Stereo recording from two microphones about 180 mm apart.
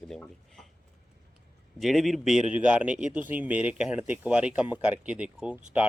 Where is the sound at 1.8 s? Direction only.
Centre (ahead or behind).